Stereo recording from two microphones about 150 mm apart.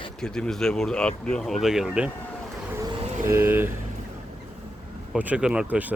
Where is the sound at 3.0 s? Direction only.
45° right (ahead or behind).